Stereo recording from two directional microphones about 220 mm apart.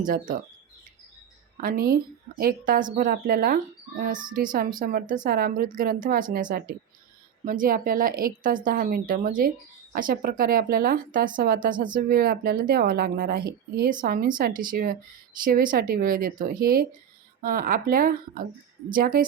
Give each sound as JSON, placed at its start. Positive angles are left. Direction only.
{"t": 0.0, "sound": "a woman's voice", "side_deg": -40}
{"t": 1.6, "sound": "a woman's voice", "side_deg": -40}